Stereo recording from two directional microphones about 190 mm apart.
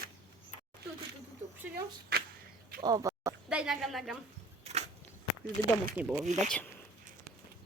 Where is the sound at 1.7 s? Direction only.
55° right (ahead or behind).